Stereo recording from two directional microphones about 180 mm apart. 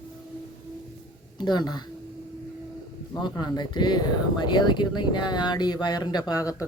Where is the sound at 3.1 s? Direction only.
25° left (ahead or behind).